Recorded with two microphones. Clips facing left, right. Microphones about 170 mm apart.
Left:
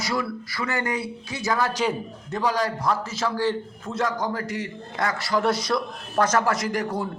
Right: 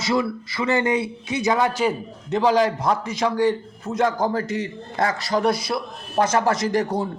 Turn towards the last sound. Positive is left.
turn(degrees=-25)  # may be behind; listen again after turning